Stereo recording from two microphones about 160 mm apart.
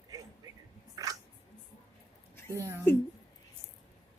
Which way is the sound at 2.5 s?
15° right (ahead or behind).